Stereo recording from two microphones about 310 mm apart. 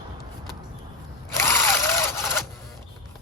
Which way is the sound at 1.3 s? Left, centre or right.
Centre.